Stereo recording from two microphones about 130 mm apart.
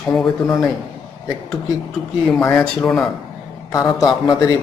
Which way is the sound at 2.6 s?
5° left (ahead or behind).